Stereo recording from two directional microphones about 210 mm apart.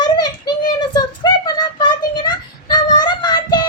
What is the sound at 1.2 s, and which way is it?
Child singing, 20° left (ahead or behind).